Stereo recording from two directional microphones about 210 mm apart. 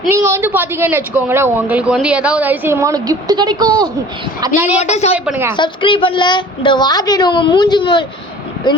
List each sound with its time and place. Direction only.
0.1 s speech: 10° right (ahead or behind)
4.8 s a woman's voice: 30° left (ahead or behind)